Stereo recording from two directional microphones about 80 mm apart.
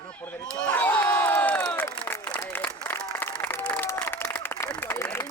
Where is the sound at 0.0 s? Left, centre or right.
Centre.